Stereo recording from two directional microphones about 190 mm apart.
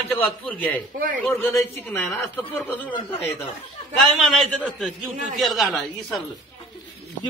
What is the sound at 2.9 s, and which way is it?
Speech, 30° left (ahead or behind).